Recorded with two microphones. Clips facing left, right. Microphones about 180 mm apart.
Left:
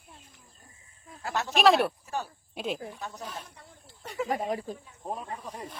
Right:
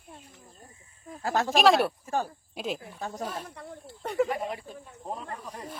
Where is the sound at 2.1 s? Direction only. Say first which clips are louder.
Right 5 dB; 50° right (ahead or behind).